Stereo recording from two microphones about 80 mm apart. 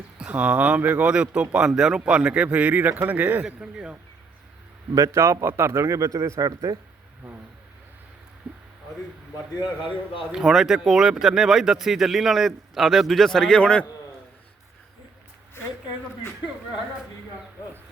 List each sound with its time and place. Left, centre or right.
0.2 s speech: centre
4.9 s speech: right
8.4 s speech: centre
10.3 s speech: centre